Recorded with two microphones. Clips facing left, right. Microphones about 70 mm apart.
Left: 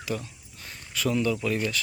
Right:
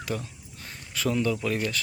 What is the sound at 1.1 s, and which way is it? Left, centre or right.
Speech, right.